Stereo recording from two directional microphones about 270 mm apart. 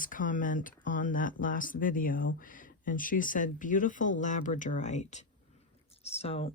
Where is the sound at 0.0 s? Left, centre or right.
Left.